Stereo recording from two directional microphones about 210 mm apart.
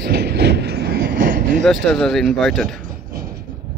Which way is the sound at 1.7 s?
Centre (ahead or behind).